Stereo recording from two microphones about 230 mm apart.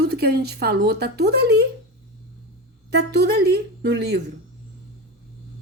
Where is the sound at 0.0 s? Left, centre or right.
Right.